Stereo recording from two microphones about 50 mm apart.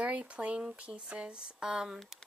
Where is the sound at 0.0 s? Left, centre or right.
Right.